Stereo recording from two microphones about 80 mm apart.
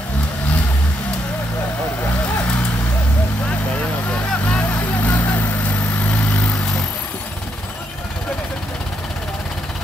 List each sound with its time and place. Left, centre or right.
4.6 s vehicle: left